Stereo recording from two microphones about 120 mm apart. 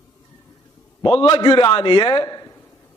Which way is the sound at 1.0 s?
45° left (ahead or behind).